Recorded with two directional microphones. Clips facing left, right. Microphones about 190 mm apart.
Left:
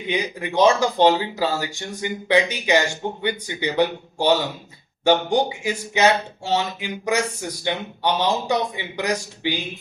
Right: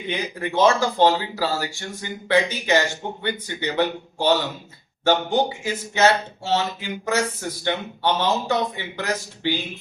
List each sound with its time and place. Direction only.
0.1 s speech: 15° left (ahead or behind)